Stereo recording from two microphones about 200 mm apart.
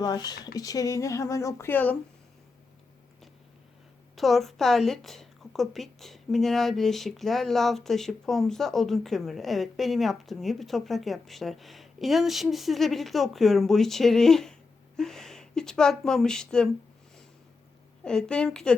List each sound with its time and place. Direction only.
0.0 s speech: 20° left (ahead or behind)
4.1 s a woman's voice: centre (ahead or behind)
18.0 s a woman's voice: 5° left (ahead or behind)